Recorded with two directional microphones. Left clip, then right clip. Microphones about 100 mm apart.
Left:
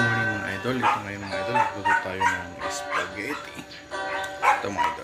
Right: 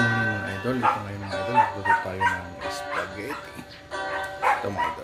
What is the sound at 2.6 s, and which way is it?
Speech, centre (ahead or behind).